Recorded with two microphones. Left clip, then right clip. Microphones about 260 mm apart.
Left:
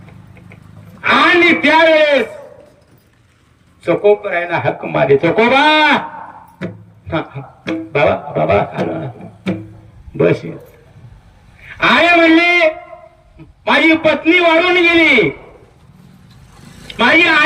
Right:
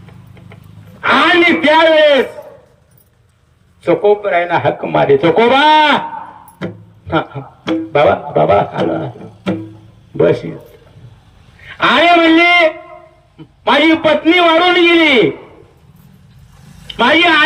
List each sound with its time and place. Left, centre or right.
1.0 s a man's voice: centre
3.8 s speech: centre
7.1 s speech: centre
10.2 s speech: centre
11.7 s speech: centre
16.9 s speech: centre